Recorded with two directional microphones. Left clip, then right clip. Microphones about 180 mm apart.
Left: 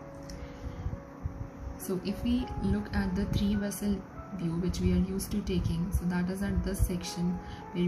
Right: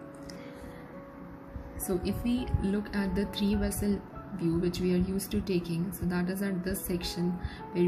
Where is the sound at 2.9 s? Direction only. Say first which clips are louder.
Right 1 dB; 15° right (ahead or behind).